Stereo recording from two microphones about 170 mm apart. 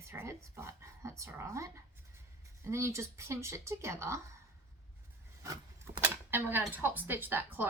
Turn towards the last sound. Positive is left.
turn(degrees=-10)  # may be behind; listen again after turning